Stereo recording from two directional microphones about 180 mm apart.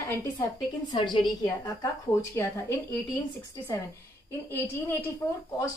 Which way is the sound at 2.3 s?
15° left (ahead or behind).